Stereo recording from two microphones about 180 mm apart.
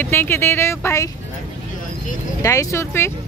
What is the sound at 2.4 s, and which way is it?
Speech, 20° left (ahead or behind).